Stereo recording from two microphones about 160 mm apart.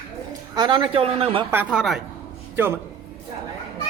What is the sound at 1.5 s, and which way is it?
Speech, 10° right (ahead or behind).